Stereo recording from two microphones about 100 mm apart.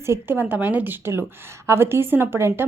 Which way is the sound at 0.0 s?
25° right (ahead or behind).